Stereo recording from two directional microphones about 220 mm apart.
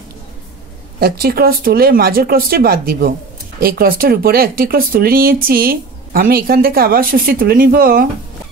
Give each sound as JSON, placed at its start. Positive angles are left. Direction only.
{"t": 0.9, "sound": "speech", "side_deg": -45}